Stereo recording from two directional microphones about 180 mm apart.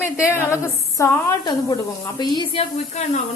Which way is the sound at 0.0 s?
15° left (ahead or behind).